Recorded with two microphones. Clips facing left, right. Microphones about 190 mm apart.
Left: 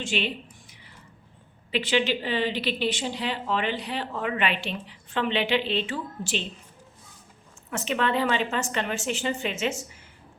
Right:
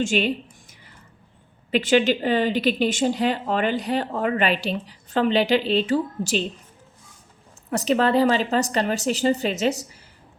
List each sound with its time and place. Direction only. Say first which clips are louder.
0.0 s a sound: right 7 dB; 45° right (ahead or behind)
1.7 s speech: right 6 dB; 45° right (ahead or behind)
7.7 s a woman's voice: right 7 dB; 35° right (ahead or behind)